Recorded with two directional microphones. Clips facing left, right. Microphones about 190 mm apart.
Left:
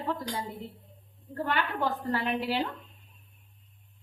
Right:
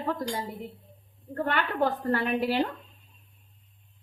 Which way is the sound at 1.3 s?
50° right (ahead or behind).